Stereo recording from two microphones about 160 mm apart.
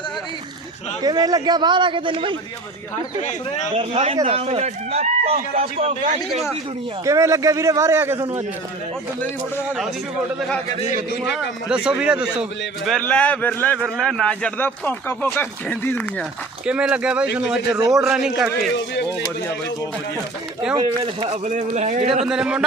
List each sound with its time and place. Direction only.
1.0 s a man's voice: 25° right (ahead or behind)
3.2 s speech: 50° left (ahead or behind)
3.8 s speech: 40° right (ahead or behind)
7.0 s a man's voice: 20° right (ahead or behind)
11.7 s a man's voice: 5° right (ahead or behind); by 13.7 s 10° left (ahead or behind)
13.7 s speech: centre (ahead or behind)
16.6 s a man's voice: 5° right (ahead or behind)
20.7 s a man's voice: 25° right (ahead or behind)
21.2 s speech: 45° right (ahead or behind)
22.3 s a man's voice: 5° right (ahead or behind)